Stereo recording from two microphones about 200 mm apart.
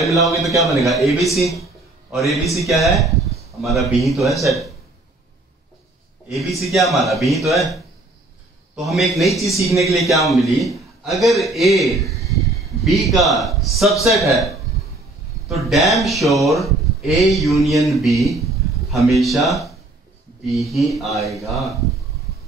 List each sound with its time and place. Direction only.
0.6 s a man's voice: centre (ahead or behind)
6.2 s speech: centre (ahead or behind)
8.8 s a man's voice: centre (ahead or behind)